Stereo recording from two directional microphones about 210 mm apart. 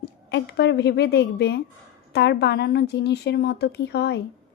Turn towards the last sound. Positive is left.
turn(degrees=50)  # may be behind; listen again after turning